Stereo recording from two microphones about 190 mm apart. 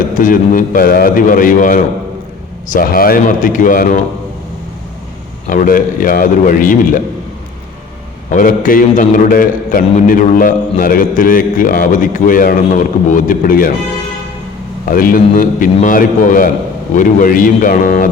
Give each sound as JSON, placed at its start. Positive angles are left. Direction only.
{"t": 0.1, "sound": "a man's voice", "side_deg": 45}
{"t": 5.5, "sound": "a man's voice", "side_deg": 45}
{"t": 8.3, "sound": "a man's voice", "side_deg": 45}
{"t": 14.8, "sound": "a man's voice", "side_deg": 45}